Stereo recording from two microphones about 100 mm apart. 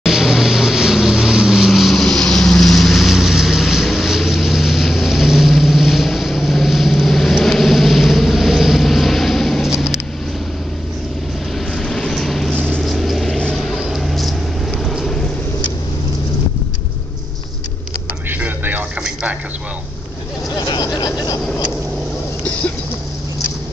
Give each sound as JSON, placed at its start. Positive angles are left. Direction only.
{"t": 0.0, "sound": "vehicle", "side_deg": -5}
{"t": 11.7, "sound": "vehicle", "side_deg": 5}
{"t": 18.4, "sound": "television", "side_deg": -20}
{"t": 20.5, "sound": "vehicle", "side_deg": 45}